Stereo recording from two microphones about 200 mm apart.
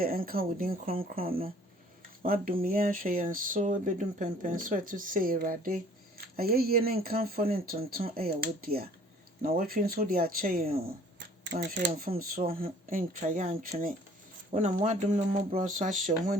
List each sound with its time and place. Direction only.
0.0 s speech: 45° right (ahead or behind)